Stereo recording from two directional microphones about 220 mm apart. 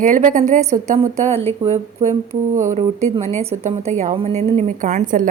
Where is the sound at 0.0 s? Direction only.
35° right (ahead or behind).